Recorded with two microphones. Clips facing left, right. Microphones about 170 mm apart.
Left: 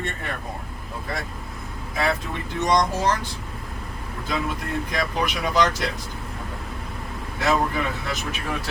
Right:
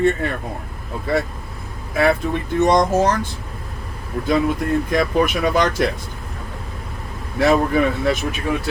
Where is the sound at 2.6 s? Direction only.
50° right (ahead or behind).